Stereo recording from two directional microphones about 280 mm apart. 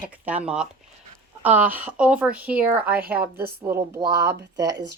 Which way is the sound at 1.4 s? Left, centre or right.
Centre.